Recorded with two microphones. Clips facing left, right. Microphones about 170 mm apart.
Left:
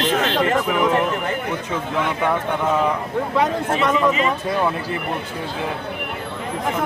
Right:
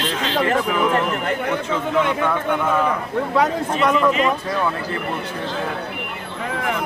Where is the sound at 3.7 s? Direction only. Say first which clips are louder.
Right 1 dB; 5° left (ahead or behind).